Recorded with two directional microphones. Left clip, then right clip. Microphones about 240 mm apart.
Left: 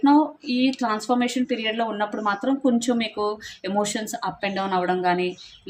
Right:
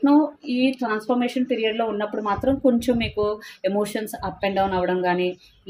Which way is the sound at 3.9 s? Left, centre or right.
Centre.